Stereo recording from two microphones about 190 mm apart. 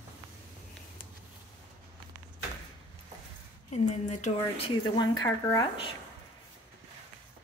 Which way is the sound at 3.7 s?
40° left (ahead or behind).